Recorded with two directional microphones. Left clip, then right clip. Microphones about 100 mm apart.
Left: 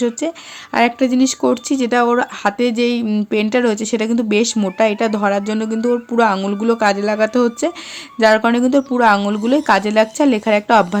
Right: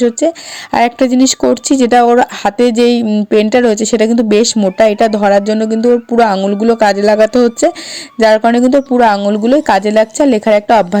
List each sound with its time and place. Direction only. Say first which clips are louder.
0.0 s a woman's voice: right 8 dB; 35° right (ahead or behind)
0.7 s a woman's voice: right 5 dB; 80° right; by 6.8 s 35° right (ahead or behind)
6.8 s speech: right 8 dB; 55° right (ahead or behind)
8.2 s a woman's voice: right 5 dB; 35° right (ahead or behind)